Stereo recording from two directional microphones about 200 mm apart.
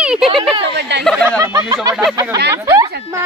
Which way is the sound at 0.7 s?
60° right (ahead or behind).